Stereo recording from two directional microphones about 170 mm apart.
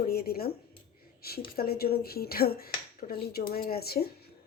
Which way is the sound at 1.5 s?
65° left (ahead or behind).